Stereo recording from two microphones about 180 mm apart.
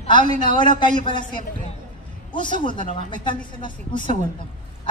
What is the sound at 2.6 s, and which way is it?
A man's voice, 25° left (ahead or behind).